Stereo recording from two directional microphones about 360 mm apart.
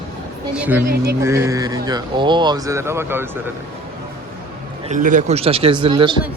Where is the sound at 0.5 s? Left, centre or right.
Centre.